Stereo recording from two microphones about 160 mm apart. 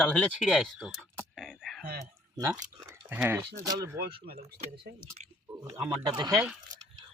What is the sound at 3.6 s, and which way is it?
Speech, 20° right (ahead or behind).